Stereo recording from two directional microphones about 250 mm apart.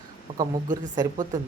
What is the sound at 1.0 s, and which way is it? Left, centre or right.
Speech, centre.